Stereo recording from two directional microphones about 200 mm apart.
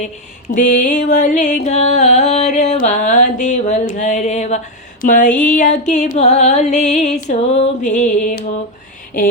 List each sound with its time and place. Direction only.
0.5 s music: 40° left (ahead or behind)